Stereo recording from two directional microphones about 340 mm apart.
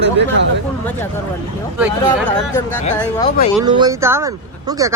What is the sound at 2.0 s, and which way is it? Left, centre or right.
Speech, centre.